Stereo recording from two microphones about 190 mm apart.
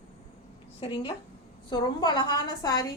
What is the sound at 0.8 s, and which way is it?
A woman's voice, 25° left (ahead or behind).